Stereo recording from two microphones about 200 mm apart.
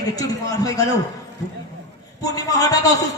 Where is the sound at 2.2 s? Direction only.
15° left (ahead or behind).